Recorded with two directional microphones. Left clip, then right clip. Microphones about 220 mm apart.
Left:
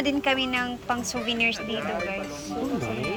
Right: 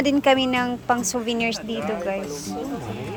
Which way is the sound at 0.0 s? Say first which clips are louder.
Right 6 dB; 25° right (ahead or behind).